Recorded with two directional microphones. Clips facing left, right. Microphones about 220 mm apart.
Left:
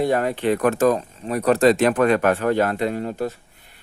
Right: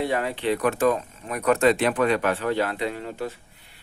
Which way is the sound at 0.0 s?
45° left (ahead or behind).